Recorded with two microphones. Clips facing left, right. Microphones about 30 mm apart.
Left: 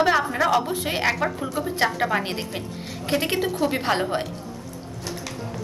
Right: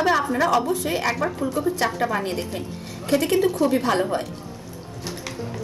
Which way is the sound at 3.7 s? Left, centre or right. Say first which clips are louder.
Right 2 dB; left.